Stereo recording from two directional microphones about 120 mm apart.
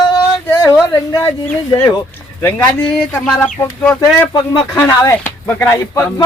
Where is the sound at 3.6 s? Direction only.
20° left (ahead or behind).